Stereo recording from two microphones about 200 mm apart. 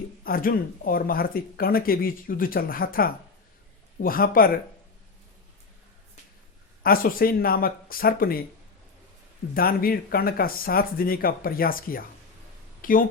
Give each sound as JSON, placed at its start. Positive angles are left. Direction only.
{"t": 0.3, "sound": "speech", "side_deg": 45}
{"t": 6.8, "sound": "speech", "side_deg": 45}
{"t": 9.6, "sound": "speech", "side_deg": 45}